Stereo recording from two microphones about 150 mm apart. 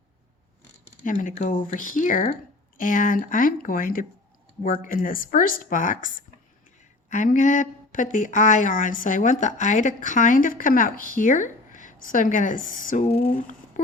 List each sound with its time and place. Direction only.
1.0 s a woman's voice: 60° left (ahead or behind)
7.1 s a woman's voice: 60° left (ahead or behind)
13.2 s a sound: 65° left (ahead or behind)